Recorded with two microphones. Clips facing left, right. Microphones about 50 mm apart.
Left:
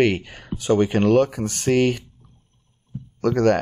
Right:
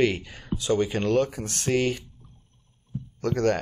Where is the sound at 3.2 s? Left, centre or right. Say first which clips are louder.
Left 6 dB; left.